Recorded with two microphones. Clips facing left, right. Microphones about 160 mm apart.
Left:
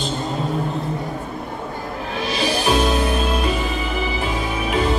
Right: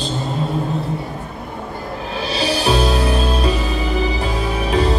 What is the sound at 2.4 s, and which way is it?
Music, 30° right (ahead or behind).